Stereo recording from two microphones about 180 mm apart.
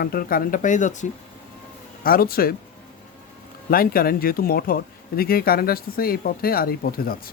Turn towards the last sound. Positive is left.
turn(degrees=55)  # may be behind; listen again after turning